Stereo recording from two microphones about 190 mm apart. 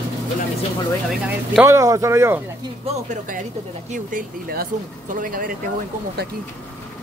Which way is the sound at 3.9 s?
45° right (ahead or behind).